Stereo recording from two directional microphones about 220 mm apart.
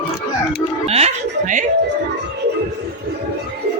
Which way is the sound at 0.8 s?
30° right (ahead or behind).